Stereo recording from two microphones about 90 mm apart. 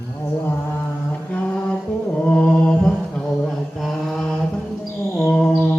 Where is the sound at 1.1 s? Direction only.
15° left (ahead or behind).